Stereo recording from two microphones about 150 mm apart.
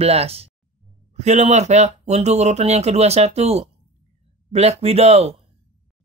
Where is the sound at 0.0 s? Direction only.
45° right (ahead or behind).